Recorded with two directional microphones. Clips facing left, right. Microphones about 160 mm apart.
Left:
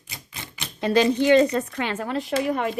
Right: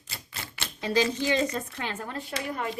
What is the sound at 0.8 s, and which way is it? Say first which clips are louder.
A woman's voice: left 7 dB; 60° left (ahead or behind).